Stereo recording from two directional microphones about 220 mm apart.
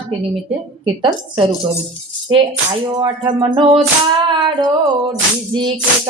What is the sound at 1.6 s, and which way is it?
Speech, 25° right (ahead or behind).